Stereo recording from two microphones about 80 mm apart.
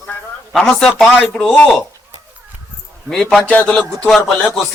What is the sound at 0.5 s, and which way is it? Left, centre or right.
Speech, centre.